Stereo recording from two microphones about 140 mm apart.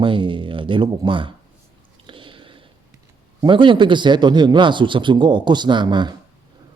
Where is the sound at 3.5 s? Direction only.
35° right (ahead or behind).